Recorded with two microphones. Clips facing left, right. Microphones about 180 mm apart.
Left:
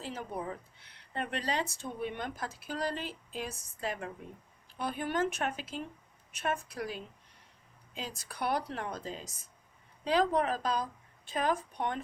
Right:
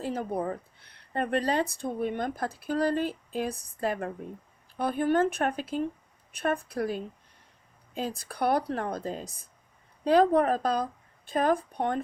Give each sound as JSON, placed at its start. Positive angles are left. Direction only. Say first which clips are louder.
{"t": 0.0, "sound": "speech", "louder": "right 8 dB", "side_deg": -50}
{"t": 1.9, "sound": "speech", "louder": "right 7 dB", "side_deg": -45}
{"t": 8.3, "sound": "speech", "louder": "right 6 dB", "side_deg": -55}